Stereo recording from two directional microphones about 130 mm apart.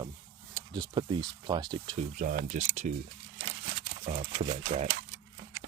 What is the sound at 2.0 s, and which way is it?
Speech, 80° right.